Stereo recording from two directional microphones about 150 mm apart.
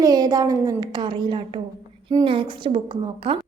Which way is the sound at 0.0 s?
25° right (ahead or behind).